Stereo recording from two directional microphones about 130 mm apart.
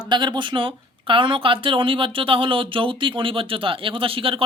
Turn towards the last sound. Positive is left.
turn(degrees=-45)  # may be behind; listen again after turning